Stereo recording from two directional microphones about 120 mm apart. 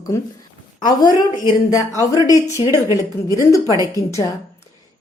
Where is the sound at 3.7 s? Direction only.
30° right (ahead or behind).